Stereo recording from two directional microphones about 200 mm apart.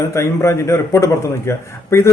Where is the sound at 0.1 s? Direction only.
15° left (ahead or behind).